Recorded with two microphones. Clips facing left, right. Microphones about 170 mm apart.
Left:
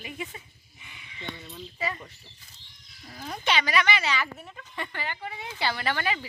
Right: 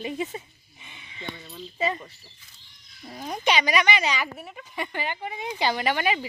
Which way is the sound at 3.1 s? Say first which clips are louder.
Right 4 dB; 20° right (ahead or behind).